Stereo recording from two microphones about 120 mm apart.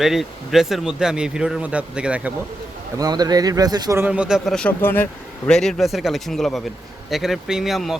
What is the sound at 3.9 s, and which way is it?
Speech, 10° right (ahead or behind).